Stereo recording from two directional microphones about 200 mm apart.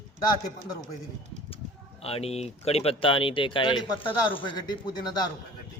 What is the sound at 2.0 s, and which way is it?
Speech, 30° left (ahead or behind).